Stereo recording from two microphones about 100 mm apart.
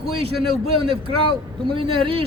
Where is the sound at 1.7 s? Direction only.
60° right (ahead or behind).